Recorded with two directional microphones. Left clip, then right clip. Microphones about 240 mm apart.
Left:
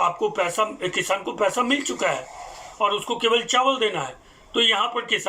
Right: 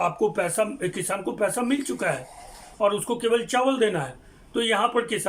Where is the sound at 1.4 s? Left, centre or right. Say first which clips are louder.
Left 4 dB; right.